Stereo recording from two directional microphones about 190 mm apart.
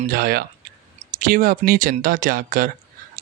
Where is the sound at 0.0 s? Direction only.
50° right (ahead or behind).